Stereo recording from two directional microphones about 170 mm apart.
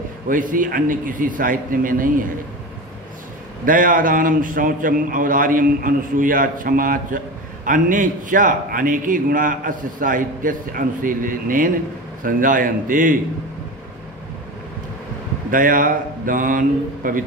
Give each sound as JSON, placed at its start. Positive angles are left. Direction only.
{"t": 0.3, "sound": "a man's voice", "side_deg": -50}
{"t": 3.6, "sound": "a man's voice", "side_deg": -55}
{"t": 15.5, "sound": "a man's voice", "side_deg": -55}